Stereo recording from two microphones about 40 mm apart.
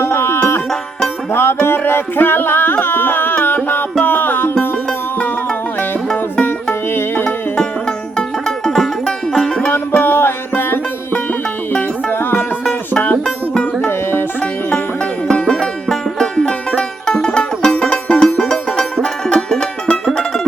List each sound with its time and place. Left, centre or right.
0.0 s music: left
1.6 s music: left
6.9 s music: left
7.6 s music: centre
8.7 s music: centre
9.9 s music: left
12.9 s music: left
15.4 s music: centre
16.4 s music: left
18.3 s music: centre